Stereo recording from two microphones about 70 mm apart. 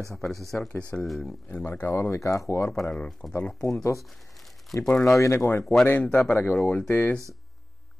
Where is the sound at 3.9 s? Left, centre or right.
Centre.